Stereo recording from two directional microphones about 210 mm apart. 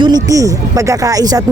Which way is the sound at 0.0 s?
15° right (ahead or behind).